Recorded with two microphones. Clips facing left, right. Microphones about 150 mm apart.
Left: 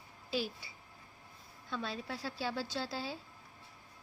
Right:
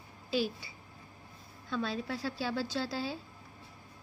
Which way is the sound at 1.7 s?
90° right.